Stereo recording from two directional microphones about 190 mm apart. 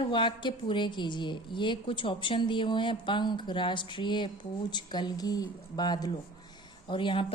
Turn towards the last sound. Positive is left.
turn(degrees=25)  # may be behind; listen again after turning